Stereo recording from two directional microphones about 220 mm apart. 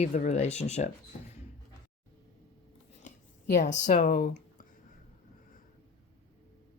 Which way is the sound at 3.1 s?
35° left (ahead or behind).